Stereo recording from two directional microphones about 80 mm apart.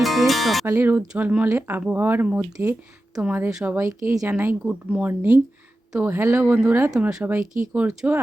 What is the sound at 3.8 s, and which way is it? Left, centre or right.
Speech, right.